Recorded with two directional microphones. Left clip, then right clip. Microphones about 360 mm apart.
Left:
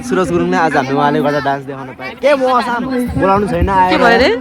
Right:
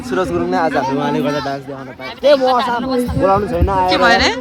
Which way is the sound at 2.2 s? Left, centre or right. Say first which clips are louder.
Even; left.